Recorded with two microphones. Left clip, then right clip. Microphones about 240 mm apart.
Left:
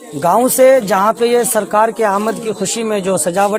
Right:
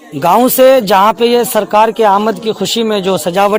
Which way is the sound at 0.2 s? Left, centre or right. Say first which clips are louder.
Right 3 dB; right.